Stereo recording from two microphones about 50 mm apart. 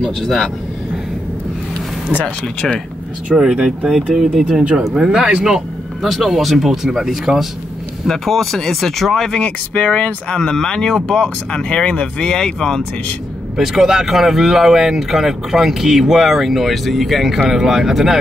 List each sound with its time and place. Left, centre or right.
0.0 s speech: centre
2.2 s speech: centre
3.3 s speech: centre
3.9 s speech: centre
5.0 s speech: centre
8.1 s speech: centre
9.3 s speech: left
13.6 s speech: centre